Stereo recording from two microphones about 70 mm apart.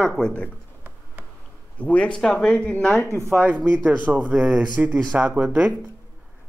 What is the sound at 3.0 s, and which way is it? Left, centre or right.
Speech, right.